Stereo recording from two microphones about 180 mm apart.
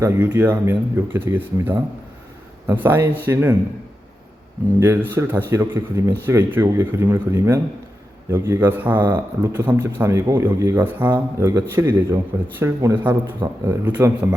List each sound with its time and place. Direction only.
0.0 s a man's voice: 15° right (ahead or behind)
4.8 s a man's voice: 10° right (ahead or behind)
9.0 s speech: 25° right (ahead or behind)
9.7 s a man's voice: 10° right (ahead or behind)